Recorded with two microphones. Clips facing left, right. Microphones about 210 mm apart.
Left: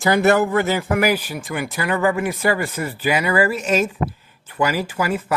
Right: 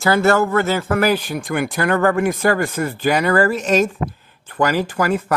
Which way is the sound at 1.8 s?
50° right (ahead or behind).